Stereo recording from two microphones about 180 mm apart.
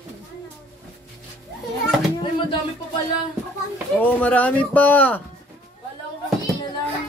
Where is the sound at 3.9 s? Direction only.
10° left (ahead or behind).